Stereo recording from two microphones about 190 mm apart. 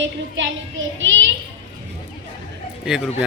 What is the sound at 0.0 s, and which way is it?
A woman's voice, 80° right.